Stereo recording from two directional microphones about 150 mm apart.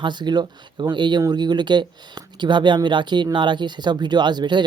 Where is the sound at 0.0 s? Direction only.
30° right (ahead or behind).